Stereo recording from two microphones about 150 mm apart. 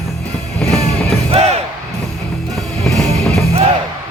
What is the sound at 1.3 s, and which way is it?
Music, 45° right (ahead or behind).